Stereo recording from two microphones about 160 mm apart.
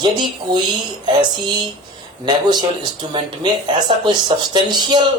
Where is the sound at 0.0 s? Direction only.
25° right (ahead or behind).